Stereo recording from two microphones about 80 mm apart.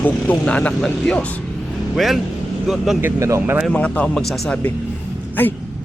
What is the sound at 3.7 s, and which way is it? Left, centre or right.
Speech, centre.